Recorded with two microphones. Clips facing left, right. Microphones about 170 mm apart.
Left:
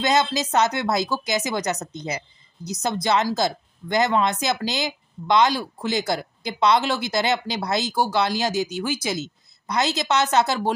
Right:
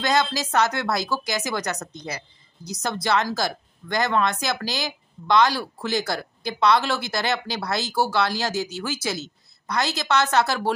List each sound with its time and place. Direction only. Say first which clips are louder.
0.0 s speech: left 2 dB; 20° left (ahead or behind)